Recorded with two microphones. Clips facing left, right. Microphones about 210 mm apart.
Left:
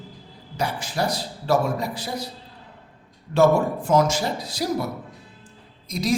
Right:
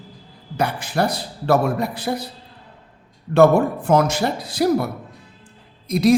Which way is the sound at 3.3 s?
60° right (ahead or behind).